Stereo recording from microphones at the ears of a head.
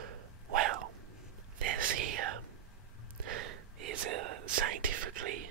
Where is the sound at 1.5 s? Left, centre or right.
Right.